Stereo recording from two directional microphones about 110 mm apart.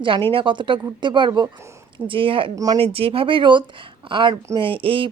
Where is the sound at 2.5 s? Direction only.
35° right (ahead or behind).